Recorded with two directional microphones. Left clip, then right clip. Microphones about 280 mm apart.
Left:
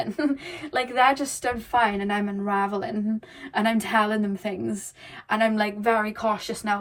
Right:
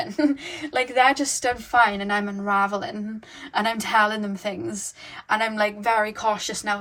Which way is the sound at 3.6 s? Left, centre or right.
Right.